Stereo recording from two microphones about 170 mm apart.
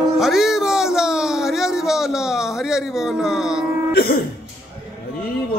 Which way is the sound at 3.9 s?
65° left (ahead or behind).